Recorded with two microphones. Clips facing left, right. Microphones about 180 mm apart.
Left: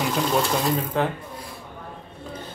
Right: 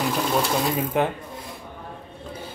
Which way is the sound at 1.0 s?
20° right (ahead or behind).